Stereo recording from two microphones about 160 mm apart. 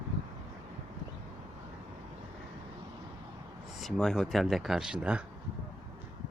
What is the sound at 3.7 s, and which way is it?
Speech, centre (ahead or behind).